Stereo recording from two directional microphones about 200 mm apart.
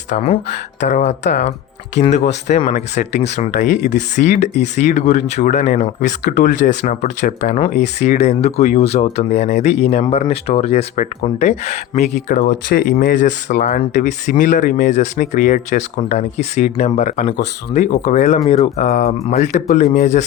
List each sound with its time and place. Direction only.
0.1 s speech: 30° left (ahead or behind)
6.0 s speech: 50° left (ahead or behind)
6.6 s speech: 40° left (ahead or behind)